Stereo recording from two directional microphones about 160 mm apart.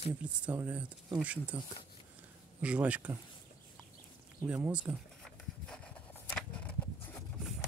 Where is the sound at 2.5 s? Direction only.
10° right (ahead or behind).